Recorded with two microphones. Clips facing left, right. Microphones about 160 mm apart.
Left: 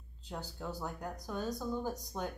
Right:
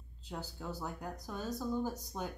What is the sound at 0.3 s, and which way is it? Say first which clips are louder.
Speech: left 1 dB; 5° right (ahead or behind).